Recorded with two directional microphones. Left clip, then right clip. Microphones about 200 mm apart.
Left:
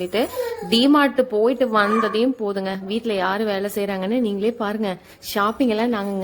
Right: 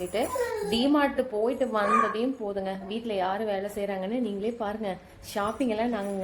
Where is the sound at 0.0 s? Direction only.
55° left (ahead or behind).